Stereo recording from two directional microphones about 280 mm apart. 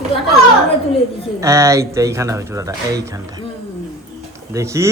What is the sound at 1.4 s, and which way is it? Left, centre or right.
A man's voice, centre.